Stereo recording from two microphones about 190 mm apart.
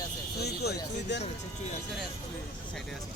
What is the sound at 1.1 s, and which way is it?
Speech, 65° left (ahead or behind).